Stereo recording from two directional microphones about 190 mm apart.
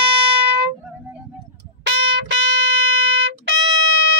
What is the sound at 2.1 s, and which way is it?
Music, 75° right (ahead or behind).